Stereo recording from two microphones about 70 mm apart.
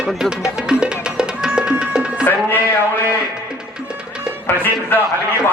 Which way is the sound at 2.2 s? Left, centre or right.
Left.